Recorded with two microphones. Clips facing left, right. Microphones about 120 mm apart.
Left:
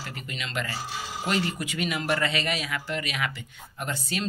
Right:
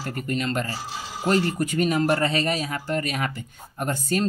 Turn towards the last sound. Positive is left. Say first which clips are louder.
# right 7 dB
turn(degrees=-45)  # may be behind; listen again after turning